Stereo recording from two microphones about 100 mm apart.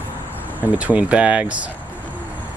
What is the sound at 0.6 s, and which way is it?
Speech, 15° right (ahead or behind).